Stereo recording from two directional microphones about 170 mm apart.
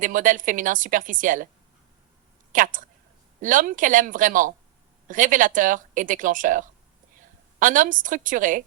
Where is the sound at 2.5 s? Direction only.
50° right (ahead or behind).